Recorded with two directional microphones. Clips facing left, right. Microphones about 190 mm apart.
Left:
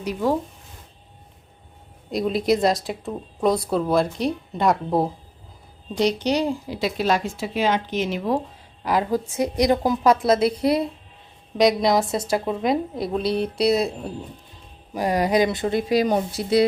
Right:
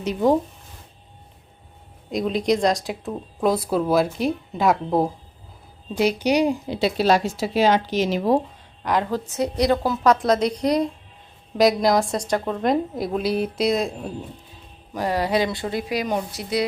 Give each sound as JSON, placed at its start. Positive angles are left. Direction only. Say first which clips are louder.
{"t": 0.0, "sound": "speech", "louder": "right 3 dB", "side_deg": -20}
{"t": 2.0, "sound": "speech", "louder": "even", "side_deg": 0}
{"t": 6.0, "sound": "speech", "louder": "right 2 dB", "side_deg": -10}
{"t": 6.7, "sound": "a woman's voice", "louder": "right 3 dB", "side_deg": -30}
{"t": 8.8, "sound": "a woman's voice", "louder": "left 1 dB", "side_deg": 5}